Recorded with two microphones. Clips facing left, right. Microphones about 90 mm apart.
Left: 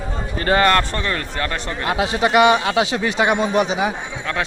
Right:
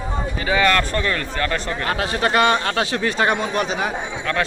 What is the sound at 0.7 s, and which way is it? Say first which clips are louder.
Speech: left 1 dB; 30° left (ahead or behind).